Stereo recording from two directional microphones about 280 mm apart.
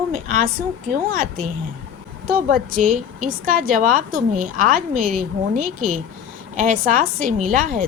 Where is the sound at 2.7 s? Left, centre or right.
Right.